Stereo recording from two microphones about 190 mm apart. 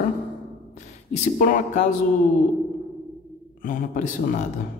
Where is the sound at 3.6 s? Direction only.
45° left (ahead or behind).